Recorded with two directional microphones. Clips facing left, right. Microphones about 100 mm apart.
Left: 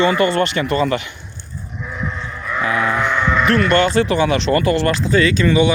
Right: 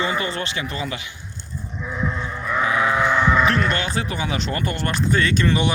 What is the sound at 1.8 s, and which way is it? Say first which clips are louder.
Sheep: right 1 dB; 10° right (ahead or behind).